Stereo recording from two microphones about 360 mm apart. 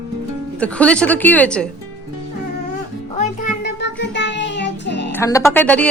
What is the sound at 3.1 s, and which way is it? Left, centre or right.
Music, left.